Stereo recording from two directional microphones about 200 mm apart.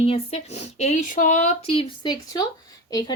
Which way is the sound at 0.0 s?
30° left (ahead or behind).